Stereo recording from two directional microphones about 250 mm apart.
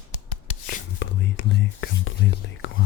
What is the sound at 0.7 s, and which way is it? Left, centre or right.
Whispering, left.